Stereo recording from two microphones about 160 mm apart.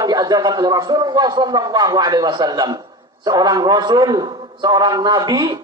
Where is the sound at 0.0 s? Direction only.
25° right (ahead or behind).